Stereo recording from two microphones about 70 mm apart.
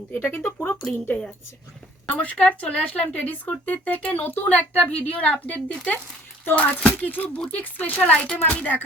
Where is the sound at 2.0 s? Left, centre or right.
Left.